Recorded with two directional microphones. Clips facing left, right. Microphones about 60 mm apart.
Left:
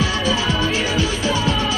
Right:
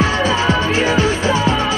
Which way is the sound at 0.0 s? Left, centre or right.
Right.